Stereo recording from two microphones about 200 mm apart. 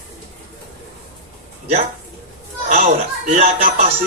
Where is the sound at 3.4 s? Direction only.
35° right (ahead or behind).